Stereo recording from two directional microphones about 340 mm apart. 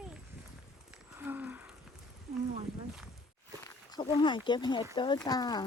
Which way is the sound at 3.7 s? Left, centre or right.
Centre.